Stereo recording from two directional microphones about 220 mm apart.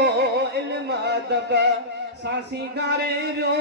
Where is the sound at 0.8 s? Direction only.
50° right (ahead or behind).